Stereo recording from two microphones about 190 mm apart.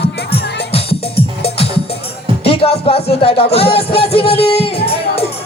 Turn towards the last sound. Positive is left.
turn(degrees=30)  # may be behind; listen again after turning